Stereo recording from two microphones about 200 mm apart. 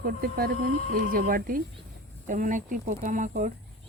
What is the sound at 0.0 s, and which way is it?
A woman's voice, 50° right (ahead or behind).